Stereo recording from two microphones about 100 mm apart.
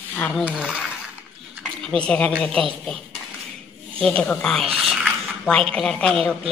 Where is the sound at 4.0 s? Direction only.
10° left (ahead or behind).